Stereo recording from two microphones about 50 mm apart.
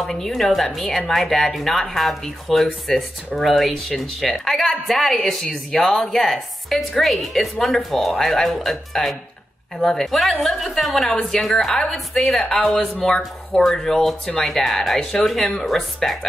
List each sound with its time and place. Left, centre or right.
0.0 s speech: centre
13.6 s speech: centre